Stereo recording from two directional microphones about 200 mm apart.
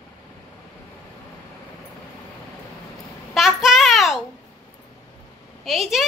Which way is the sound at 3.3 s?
Centre (ahead or behind).